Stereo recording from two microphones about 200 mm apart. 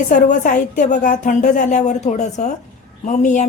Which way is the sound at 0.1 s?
40° left (ahead or behind).